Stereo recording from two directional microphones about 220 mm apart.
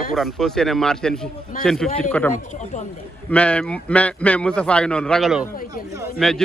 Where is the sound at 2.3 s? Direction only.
35° left (ahead or behind).